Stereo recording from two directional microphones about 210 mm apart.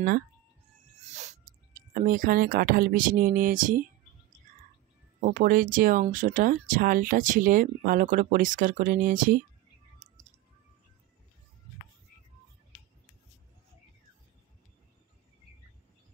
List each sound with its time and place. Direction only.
1.0 s speech: 35° right (ahead or behind)
5.2 s speech: 40° right (ahead or behind)